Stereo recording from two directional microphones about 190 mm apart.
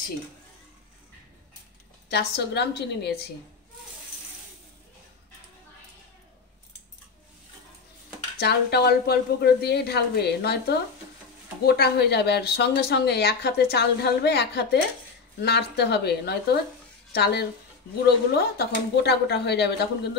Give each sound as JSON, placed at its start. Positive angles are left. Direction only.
{"t": 2.0, "sound": "speech", "side_deg": 60}
{"t": 8.4, "sound": "speech", "side_deg": 60}
{"t": 18.6, "sound": "speech", "side_deg": 60}